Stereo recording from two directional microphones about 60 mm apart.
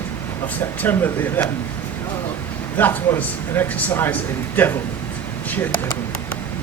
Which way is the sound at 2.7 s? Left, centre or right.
Left.